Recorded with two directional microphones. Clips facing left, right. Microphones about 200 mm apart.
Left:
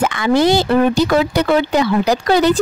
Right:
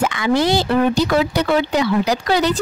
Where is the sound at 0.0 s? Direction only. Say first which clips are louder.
Left 3 dB; 50° left (ahead or behind).